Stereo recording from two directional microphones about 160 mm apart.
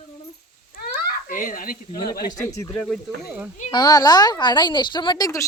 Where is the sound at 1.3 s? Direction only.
55° left (ahead or behind).